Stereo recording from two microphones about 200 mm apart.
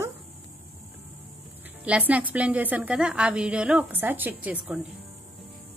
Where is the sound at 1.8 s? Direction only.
5° right (ahead or behind).